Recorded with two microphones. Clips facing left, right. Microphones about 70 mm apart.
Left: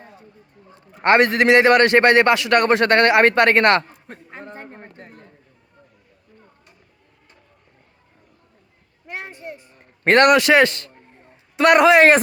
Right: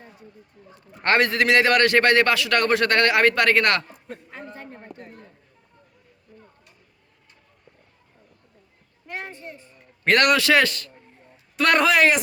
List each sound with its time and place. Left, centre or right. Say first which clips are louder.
1.0 s a man's voice: left 5 dB; left
9.0 s children playing: left 2 dB; centre
9.8 s a man's voice: left 5 dB; left